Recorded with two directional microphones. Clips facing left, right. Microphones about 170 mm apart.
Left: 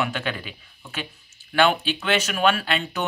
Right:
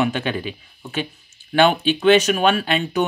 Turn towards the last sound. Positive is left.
turn(degrees=-20)  # may be behind; listen again after turning